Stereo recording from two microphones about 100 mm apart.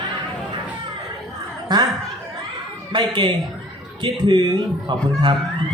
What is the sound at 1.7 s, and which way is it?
Speech, 45° right (ahead or behind).